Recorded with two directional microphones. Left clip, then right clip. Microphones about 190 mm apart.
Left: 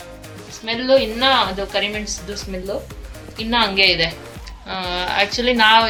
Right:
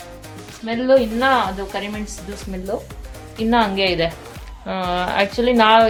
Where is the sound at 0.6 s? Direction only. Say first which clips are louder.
Even; 30° right (ahead or behind).